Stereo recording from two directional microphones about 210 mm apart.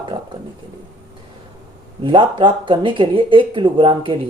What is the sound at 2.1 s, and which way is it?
Speech, 25° right (ahead or behind).